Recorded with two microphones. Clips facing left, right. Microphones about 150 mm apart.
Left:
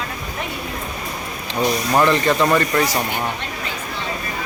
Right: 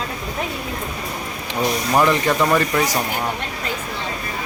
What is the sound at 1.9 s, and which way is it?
Speech, 10° right (ahead or behind).